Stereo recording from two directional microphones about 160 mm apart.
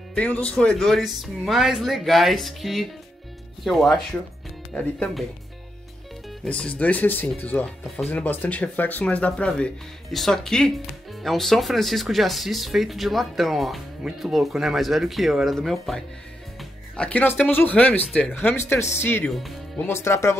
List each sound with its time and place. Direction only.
0.1 s speech: 10° left (ahead or behind)
6.4 s speech: 5° left (ahead or behind)